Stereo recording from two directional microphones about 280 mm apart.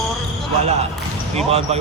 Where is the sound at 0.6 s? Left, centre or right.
Right.